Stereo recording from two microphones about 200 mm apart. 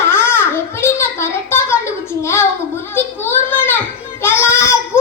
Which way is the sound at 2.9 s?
10° left (ahead or behind).